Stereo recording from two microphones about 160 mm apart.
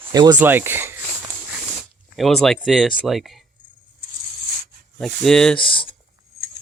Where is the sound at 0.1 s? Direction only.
25° right (ahead or behind).